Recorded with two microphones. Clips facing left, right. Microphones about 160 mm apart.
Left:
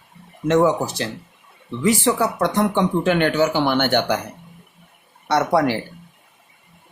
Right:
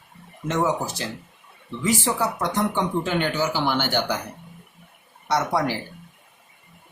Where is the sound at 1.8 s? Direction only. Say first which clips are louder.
Left 5 dB; 65° left (ahead or behind).